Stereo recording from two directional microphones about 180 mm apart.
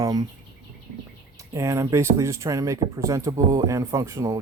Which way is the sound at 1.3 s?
15° right (ahead or behind).